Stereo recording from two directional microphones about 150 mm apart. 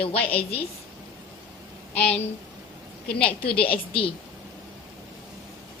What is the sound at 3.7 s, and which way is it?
Speech, 40° left (ahead or behind).